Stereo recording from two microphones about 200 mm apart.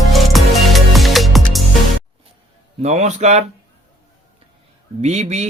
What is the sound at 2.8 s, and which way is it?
Speech, 35° right (ahead or behind).